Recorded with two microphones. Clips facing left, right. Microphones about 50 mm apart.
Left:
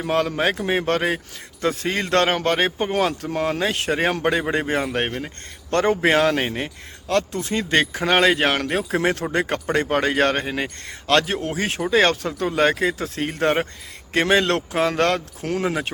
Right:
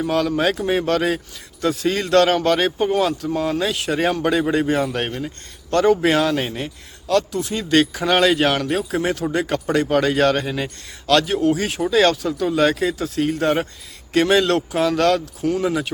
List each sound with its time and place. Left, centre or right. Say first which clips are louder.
0.0 s a man's voice: right 2 dB; left